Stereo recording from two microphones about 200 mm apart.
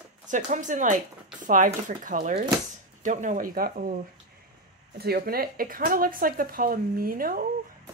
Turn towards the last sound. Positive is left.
turn(degrees=-45)  # may be behind; listen again after turning